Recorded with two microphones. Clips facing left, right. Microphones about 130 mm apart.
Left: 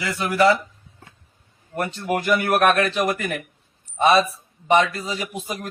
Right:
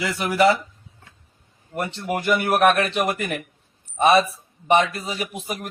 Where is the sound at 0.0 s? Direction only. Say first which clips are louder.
Even; 20° right (ahead or behind).